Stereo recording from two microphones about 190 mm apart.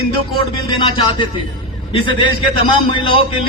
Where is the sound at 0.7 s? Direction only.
25° left (ahead or behind).